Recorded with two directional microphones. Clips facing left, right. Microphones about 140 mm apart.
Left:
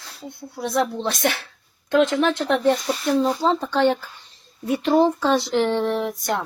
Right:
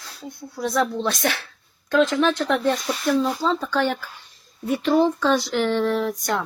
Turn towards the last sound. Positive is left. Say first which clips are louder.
# right 1 dB
turn(degrees=20)  # may be behind; listen again after turning